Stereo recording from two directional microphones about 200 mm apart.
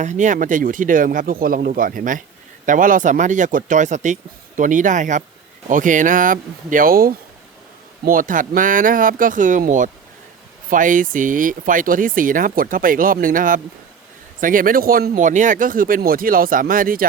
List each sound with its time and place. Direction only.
0.0 s speech: 40° right (ahead or behind)